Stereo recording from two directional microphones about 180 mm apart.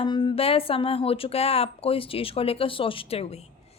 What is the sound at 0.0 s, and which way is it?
A woman's voice, 25° left (ahead or behind).